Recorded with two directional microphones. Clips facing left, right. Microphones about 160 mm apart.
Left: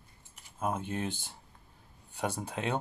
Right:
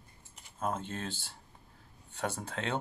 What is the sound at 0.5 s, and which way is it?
Speech, 10° left (ahead or behind).